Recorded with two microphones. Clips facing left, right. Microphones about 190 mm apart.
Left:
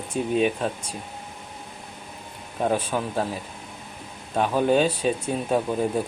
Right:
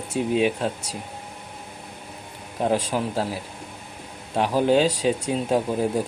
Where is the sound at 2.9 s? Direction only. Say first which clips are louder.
Right 1 dB; 10° right (ahead or behind).